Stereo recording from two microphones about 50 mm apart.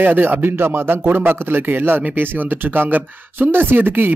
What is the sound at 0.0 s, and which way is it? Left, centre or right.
Speech, right.